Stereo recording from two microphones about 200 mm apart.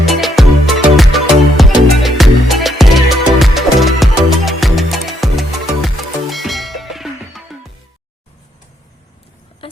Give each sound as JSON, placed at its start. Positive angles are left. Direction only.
{"t": 0.0, "sound": "music", "side_deg": 0}